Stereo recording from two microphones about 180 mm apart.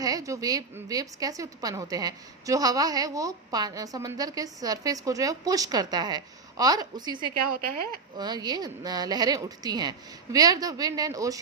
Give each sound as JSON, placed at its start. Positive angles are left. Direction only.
{"t": 0.0, "sound": "a woman's voice", "side_deg": -20}
{"t": 8.2, "sound": "a woman's voice", "side_deg": -25}